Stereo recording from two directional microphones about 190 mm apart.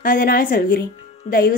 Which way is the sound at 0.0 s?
45° left (ahead or behind).